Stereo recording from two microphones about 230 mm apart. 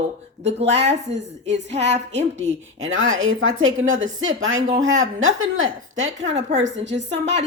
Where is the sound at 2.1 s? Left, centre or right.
Right.